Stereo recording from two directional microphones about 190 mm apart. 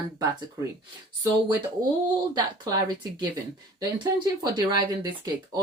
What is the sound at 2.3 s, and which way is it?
Speech, 20° right (ahead or behind).